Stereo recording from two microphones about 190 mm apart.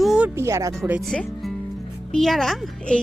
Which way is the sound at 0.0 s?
Centre (ahead or behind).